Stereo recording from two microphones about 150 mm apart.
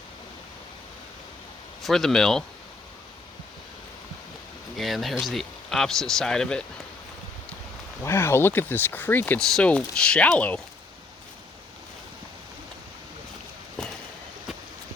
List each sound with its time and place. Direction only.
1.8 s speech: centre (ahead or behind)
4.8 s speech: centre (ahead or behind)
8.0 s speech: 15° left (ahead or behind)